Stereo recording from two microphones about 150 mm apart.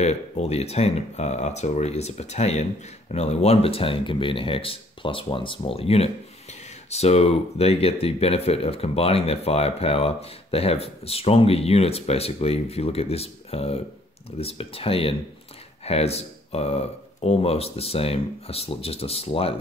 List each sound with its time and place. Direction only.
0.0 s speech: 45° left (ahead or behind)